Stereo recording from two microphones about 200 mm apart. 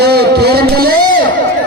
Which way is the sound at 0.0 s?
55° right (ahead or behind).